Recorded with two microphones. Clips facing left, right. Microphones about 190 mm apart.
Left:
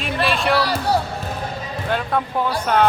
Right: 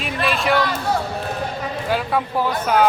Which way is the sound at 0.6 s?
35° left (ahead or behind).